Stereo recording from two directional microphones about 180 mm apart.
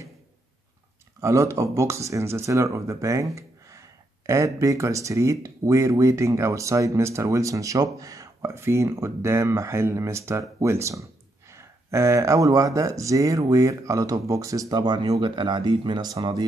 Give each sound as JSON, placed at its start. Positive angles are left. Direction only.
{"t": 1.2, "sound": "speech", "side_deg": -15}